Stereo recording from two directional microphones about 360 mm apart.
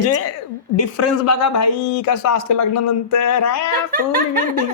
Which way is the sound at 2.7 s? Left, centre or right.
Left.